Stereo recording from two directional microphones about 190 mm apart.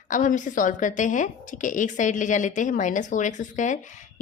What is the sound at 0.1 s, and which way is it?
A woman's voice, 40° left (ahead or behind).